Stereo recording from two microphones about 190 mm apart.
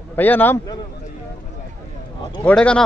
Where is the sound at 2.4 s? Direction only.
5° left (ahead or behind).